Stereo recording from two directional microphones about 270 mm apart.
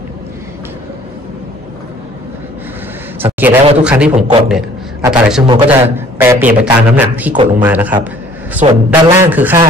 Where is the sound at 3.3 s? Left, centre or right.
Centre.